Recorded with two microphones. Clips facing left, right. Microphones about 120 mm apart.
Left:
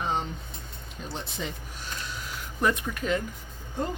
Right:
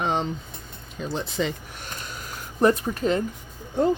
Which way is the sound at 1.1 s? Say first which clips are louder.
Right 9 dB; 90° right.